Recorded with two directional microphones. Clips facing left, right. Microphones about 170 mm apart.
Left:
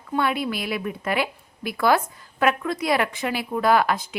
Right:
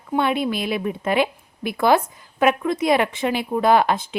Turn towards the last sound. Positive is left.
turn(degrees=-25)  # may be behind; listen again after turning